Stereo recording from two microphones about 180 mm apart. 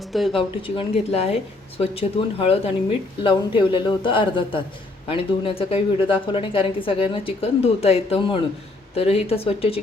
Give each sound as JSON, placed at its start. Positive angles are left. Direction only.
{"t": 0.1, "sound": "speech", "side_deg": 0}
{"t": 0.3, "sound": "a woman's voice", "side_deg": 30}